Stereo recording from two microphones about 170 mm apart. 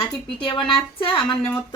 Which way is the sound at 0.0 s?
30° left (ahead or behind).